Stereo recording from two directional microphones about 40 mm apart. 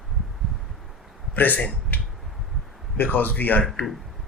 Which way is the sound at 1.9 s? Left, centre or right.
Left.